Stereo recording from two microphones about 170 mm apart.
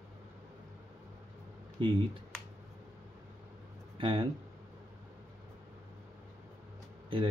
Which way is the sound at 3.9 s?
30° right (ahead or behind).